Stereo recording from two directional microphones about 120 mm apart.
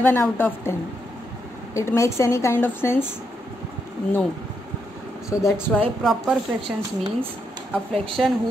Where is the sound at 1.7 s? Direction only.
25° left (ahead or behind).